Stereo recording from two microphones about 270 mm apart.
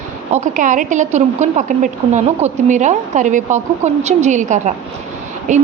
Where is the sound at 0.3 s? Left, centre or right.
Right.